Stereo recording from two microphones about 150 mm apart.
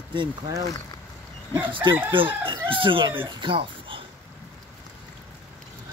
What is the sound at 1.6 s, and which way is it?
Speech, 35° right (ahead or behind).